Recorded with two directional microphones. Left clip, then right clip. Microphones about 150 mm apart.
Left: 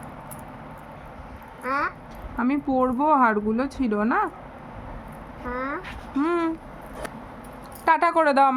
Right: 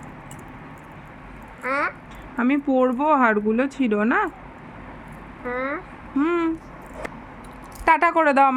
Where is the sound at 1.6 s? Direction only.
15° left (ahead or behind).